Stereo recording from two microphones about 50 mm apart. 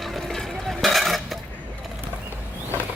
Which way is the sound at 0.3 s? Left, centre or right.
Centre.